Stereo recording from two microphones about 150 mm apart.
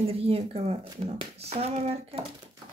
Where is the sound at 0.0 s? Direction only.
40° right (ahead or behind).